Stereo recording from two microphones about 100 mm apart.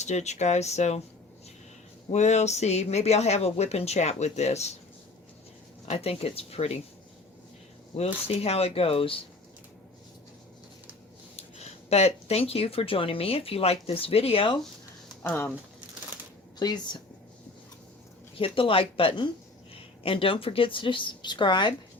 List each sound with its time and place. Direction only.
0.3 s speech: 90° left
2.0 s speech: 90° left
5.9 s speech: 85° left
7.9 s speech: 90° left; by 9.2 s 65° left (ahead or behind)
11.3 s speech: 90° left; by 14.6 s 60° left (ahead or behind)
15.2 s speech: 20° left (ahead or behind)
16.6 s speech: 45° left (ahead or behind)
18.3 s a woman's voice: 65° left (ahead or behind)
19.7 s a woman's voice: 70° left (ahead or behind); by 21.8 s 50° left (ahead or behind)